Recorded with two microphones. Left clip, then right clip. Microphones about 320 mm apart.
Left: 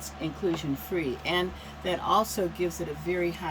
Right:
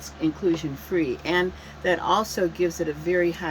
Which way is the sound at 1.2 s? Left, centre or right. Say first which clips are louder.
Right 5 dB; centre.